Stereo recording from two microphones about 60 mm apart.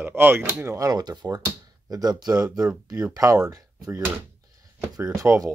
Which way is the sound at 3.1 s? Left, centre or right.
Right.